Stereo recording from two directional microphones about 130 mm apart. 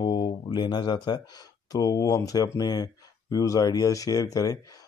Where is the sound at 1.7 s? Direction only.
30° left (ahead or behind).